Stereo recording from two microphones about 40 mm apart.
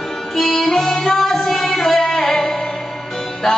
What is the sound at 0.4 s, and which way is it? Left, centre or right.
Music, centre.